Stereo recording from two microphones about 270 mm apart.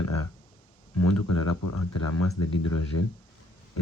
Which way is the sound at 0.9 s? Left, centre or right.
Left.